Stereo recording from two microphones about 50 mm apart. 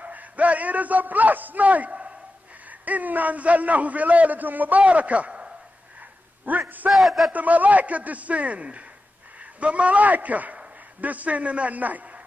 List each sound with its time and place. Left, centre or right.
0.0 s a man's voice: right
5.9 s a sound: right
6.9 s a man's voice: centre
7.3 s a man's voice: right